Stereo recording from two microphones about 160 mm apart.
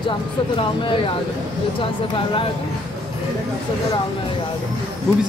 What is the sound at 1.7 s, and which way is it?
Speech, 35° left (ahead or behind).